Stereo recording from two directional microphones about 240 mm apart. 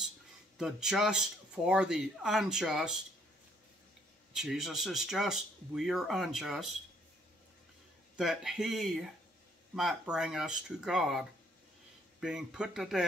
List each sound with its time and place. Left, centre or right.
0.6 s speech: centre
4.3 s speech: centre
8.2 s speech: centre